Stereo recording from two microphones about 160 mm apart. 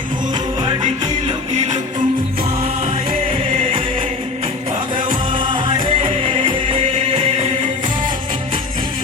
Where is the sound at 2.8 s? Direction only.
40° right (ahead or behind).